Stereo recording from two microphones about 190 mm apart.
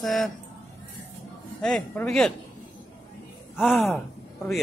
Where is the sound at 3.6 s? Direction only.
Centre (ahead or behind).